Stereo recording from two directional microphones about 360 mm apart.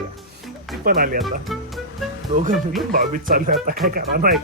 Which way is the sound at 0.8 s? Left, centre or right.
Right.